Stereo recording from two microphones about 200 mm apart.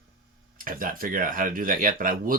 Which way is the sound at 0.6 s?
45° right (ahead or behind).